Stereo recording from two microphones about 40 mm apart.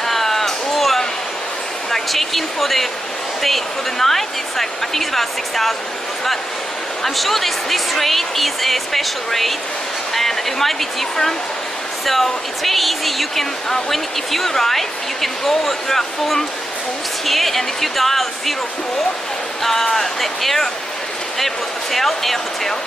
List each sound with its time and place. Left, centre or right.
0.0 s a sound: centre
1.9 s speech: centre
7.0 s speech: centre
19.6 s speech: centre
21.9 s speech: centre